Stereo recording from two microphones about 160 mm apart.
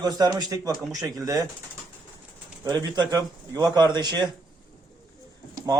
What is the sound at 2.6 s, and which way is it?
Speech, 25° right (ahead or behind).